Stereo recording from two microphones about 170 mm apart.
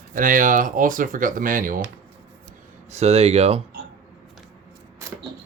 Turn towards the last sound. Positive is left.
turn(degrees=-35)  # may be behind; listen again after turning